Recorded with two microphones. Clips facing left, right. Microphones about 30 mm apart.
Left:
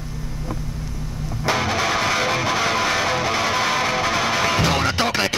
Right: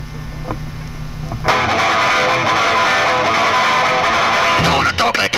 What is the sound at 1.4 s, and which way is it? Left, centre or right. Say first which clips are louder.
Music: right 6 dB; right.